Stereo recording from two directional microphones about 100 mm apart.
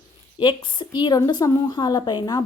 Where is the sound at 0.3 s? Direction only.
55° left (ahead or behind).